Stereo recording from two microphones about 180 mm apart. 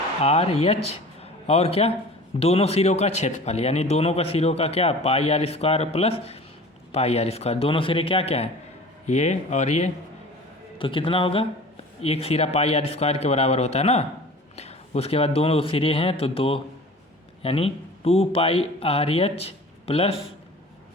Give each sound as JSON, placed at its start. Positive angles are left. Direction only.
{"t": 0.2, "sound": "a man's voice", "side_deg": 35}
{"t": 10.8, "sound": "a man's voice", "side_deg": 30}